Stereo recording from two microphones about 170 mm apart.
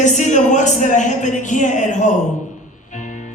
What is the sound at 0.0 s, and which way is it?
Speech, 45° left (ahead or behind).